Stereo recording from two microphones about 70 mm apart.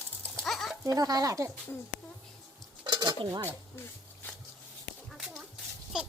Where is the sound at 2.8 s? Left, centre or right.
Right.